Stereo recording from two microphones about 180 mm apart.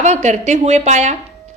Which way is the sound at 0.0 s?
40° right (ahead or behind).